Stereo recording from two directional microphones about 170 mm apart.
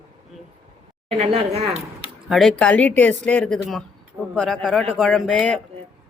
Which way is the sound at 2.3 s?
Centre (ahead or behind).